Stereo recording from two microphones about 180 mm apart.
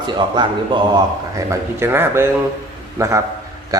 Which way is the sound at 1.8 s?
15° right (ahead or behind).